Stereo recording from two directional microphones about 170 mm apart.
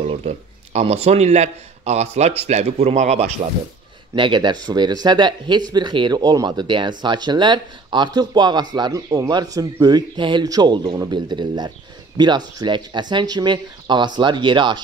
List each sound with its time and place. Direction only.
0.0 s speech: 35° right (ahead or behind)
4.1 s speech: 30° right (ahead or behind)